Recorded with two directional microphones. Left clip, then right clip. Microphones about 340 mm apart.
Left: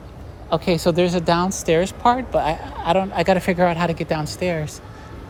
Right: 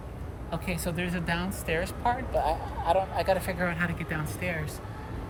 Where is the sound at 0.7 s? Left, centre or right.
Centre.